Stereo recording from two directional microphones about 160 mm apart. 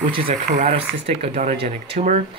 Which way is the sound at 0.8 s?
40° right (ahead or behind).